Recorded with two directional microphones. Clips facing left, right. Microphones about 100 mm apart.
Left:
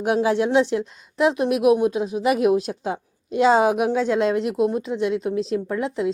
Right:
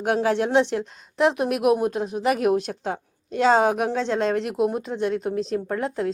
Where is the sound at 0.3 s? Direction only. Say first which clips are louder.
Even; 45° right (ahead or behind).